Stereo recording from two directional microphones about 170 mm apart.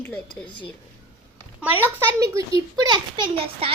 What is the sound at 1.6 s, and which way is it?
A child's voice, 10° right (ahead or behind).